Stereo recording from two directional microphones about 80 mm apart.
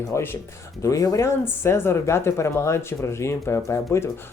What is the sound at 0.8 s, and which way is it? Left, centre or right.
Speech, left.